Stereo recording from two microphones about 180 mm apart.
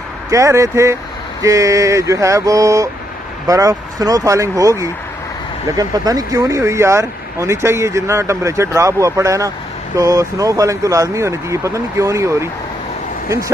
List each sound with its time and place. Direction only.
0.3 s speech: 15° right (ahead or behind)